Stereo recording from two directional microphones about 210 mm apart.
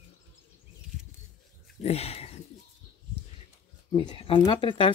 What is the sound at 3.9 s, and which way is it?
Speech, 25° left (ahead or behind).